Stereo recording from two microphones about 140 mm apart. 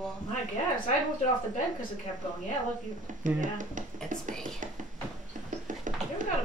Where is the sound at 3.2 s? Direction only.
65° right (ahead or behind).